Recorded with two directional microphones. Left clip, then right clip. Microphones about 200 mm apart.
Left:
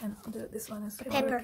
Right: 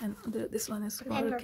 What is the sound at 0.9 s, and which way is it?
Speech, 45° left (ahead or behind).